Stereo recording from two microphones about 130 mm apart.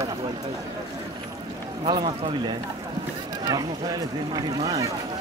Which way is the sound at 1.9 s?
40° right (ahead or behind).